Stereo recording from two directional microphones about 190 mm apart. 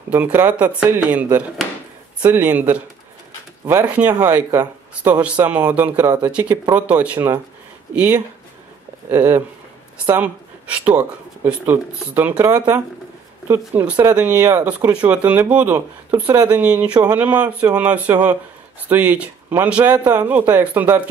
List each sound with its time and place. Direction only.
0.1 s speech: 10° right (ahead or behind)